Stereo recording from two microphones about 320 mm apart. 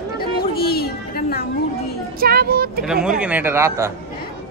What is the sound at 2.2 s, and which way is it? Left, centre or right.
Speech, right.